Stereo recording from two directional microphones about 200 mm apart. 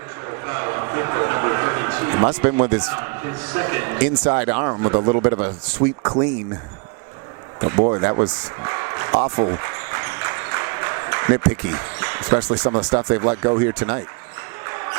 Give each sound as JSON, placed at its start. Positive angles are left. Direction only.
{"t": 0.3, "sound": "a sound", "side_deg": -20}
{"t": 2.6, "sound": "speech", "side_deg": -20}
{"t": 7.8, "sound": "speech", "side_deg": -25}
{"t": 9.1, "sound": "a sound", "side_deg": -30}
{"t": 12.7, "sound": "speech", "side_deg": -25}
{"t": 14.7, "sound": "music", "side_deg": -20}